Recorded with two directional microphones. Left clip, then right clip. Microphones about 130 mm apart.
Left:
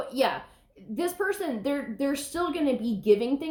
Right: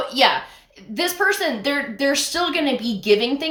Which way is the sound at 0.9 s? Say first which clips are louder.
Right 9 dB; 20° right (ahead or behind).